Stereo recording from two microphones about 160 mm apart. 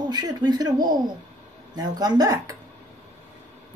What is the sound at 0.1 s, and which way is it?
Speech, 25° right (ahead or behind).